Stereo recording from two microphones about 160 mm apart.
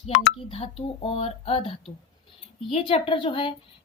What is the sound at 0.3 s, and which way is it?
A woman's voice, 35° left (ahead or behind).